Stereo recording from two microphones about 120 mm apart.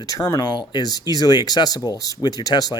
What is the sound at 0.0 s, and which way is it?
Speech, 30° left (ahead or behind).